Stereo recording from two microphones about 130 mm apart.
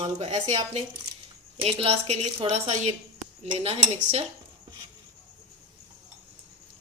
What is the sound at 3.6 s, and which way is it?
Speech, 50° right (ahead or behind).